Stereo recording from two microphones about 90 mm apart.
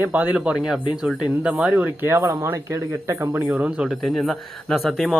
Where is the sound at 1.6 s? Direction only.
15° right (ahead or behind).